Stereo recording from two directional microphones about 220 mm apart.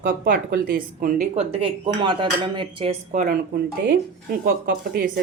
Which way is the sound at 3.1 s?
40° right (ahead or behind).